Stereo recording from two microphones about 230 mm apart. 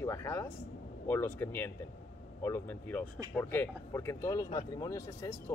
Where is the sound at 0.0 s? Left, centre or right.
Centre.